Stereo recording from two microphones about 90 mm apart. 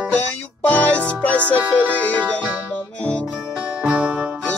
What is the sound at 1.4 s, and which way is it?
Music, 20° right (ahead or behind).